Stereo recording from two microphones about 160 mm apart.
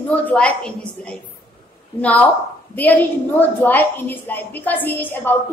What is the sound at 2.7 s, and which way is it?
A woman's voice, 10° left (ahead or behind).